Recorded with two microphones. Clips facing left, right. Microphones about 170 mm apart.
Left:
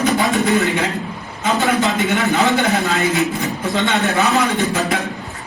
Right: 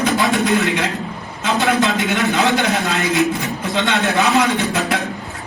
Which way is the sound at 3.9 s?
65° right (ahead or behind).